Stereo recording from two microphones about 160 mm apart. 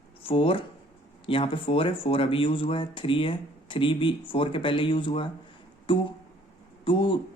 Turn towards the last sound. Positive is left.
turn(degrees=30)  # may be behind; listen again after turning